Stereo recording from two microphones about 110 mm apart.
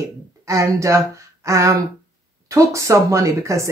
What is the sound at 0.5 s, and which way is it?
A woman's voice, 30° right (ahead or behind).